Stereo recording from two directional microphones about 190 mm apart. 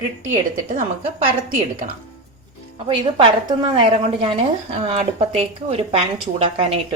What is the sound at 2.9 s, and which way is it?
A woman's voice, 30° right (ahead or behind).